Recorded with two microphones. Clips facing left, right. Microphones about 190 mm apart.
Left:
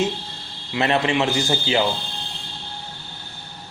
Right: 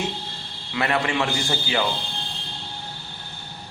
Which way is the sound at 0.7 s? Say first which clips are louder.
Left 3 dB; 25° left (ahead or behind).